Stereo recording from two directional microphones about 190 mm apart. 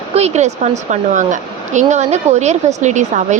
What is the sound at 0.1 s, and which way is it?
Speech, 35° right (ahead or behind).